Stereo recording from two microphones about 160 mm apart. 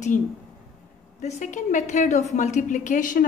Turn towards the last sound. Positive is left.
turn(degrees=55)  # may be behind; listen again after turning